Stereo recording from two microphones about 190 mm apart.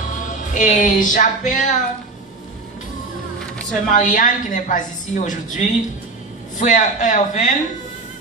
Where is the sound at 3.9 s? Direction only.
40° left (ahead or behind).